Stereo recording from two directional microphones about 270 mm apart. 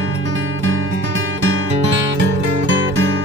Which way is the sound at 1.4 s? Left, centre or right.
Right.